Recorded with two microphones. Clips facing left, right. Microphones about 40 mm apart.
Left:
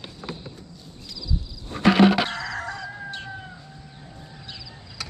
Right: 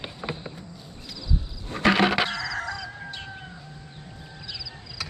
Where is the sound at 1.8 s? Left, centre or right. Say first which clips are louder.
Left 3 dB; centre.